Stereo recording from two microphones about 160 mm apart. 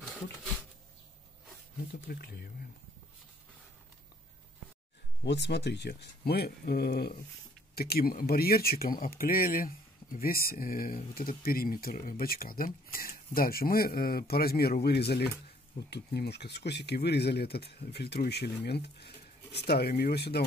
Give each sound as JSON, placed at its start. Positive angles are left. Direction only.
{"t": 2.0, "sound": "speech", "side_deg": 75}
{"t": 5.2, "sound": "speech", "side_deg": 90}